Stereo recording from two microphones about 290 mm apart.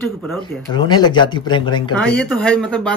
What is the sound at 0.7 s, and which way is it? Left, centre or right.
Speech, centre.